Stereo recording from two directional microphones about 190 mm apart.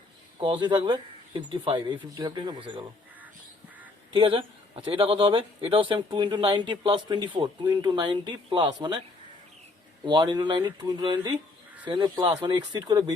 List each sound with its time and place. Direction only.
0.3 s a man's voice: 25° right (ahead or behind)
4.1 s a man's voice: 30° right (ahead or behind)
10.1 s a man's voice: 20° right (ahead or behind)